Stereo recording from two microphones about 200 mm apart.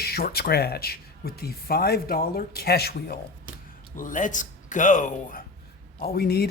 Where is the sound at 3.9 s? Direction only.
40° left (ahead or behind).